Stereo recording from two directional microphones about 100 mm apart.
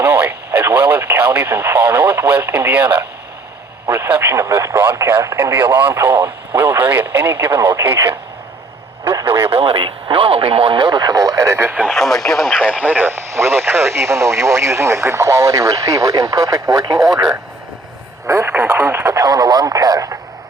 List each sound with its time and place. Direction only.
0.0 s speech: 20° right (ahead or behind)
9.5 s speech: 70° right (ahead or behind); by 11.8 s 25° right (ahead or behind)
11.8 s speech: centre (ahead or behind); by 17.0 s 40° right (ahead or behind)
17.0 s speech: 5° right (ahead or behind)
18.3 s speech: 30° right (ahead or behind)